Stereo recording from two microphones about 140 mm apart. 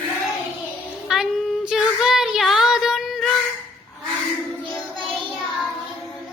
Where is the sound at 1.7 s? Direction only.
5° right (ahead or behind).